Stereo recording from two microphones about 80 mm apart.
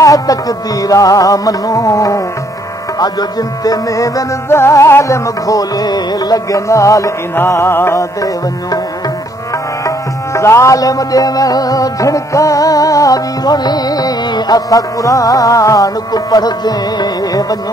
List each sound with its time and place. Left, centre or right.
0.0 s music: left
3.0 s music: left
4.5 s music: left
7.3 s music: left
9.8 s music: left